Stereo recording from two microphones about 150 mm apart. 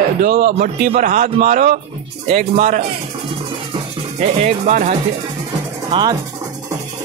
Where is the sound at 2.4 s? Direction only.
50° right (ahead or behind).